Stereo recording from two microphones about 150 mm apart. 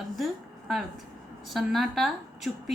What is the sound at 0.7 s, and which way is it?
A woman's voice, centre (ahead or behind).